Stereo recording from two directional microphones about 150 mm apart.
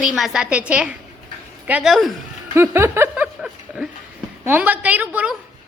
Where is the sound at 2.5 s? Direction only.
15° right (ahead or behind).